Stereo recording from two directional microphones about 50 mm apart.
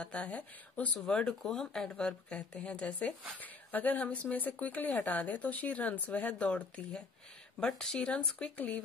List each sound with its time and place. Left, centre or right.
0.0 s speech: left
1.4 s speech: centre; by 6.3 s left
6.3 s speech: centre
7.6 s speech: centre